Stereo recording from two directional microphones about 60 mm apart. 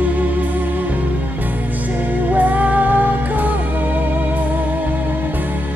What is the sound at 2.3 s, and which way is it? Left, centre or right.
Music, right.